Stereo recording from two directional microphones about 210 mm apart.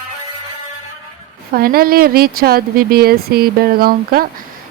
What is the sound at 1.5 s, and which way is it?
Speech, 45° right (ahead or behind).